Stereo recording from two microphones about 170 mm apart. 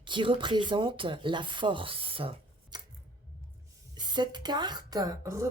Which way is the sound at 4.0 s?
25° right (ahead or behind).